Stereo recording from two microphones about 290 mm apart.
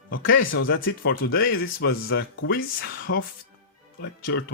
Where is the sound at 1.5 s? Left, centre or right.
Left.